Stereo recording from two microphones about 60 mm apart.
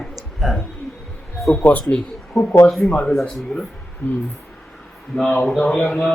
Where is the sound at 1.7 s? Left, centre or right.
Left.